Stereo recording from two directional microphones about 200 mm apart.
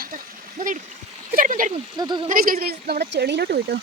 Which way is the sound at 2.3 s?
45° right (ahead or behind).